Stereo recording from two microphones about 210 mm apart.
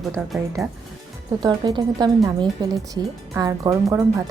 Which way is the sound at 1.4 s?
20° right (ahead or behind).